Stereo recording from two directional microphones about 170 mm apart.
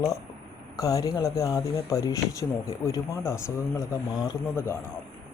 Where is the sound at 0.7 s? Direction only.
20° left (ahead or behind).